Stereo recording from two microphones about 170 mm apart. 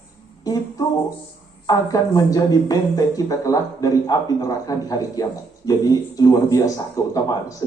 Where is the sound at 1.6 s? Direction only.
20° left (ahead or behind).